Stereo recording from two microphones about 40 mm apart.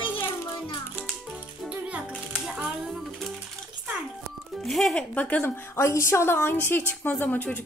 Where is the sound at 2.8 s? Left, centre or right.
Centre.